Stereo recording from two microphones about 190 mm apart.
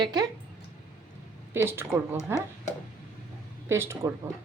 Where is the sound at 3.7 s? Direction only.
15° right (ahead or behind).